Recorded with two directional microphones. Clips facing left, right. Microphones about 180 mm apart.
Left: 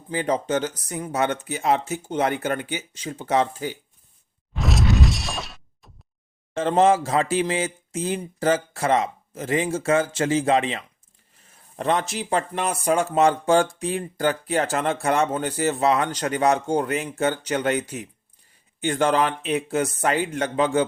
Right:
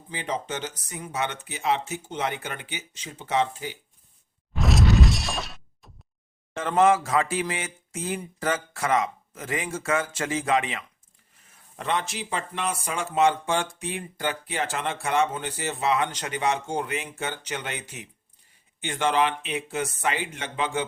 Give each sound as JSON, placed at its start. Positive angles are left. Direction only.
{"t": 0.1, "sound": "speech", "side_deg": 45}
{"t": 4.5, "sound": "shatter", "side_deg": 0}
{"t": 6.6, "sound": "speech", "side_deg": 30}